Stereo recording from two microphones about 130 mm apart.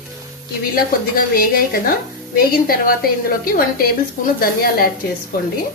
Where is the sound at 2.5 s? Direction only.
90° left.